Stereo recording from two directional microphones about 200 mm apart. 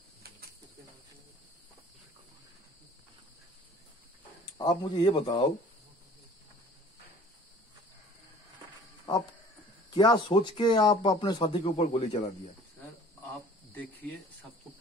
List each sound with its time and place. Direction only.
4.6 s speech: 25° left (ahead or behind)
9.1 s a man's voice: 20° left (ahead or behind)
13.7 s cricket: 10° left (ahead or behind)